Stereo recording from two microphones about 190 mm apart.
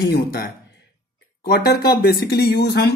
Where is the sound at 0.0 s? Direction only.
55° left (ahead or behind).